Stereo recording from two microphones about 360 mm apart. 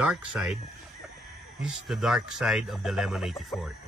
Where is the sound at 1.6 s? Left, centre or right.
Centre.